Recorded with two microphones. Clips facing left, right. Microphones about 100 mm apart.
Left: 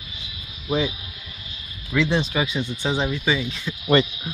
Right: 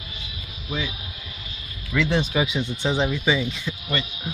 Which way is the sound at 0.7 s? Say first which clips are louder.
Left 7 dB; 40° left (ahead or behind).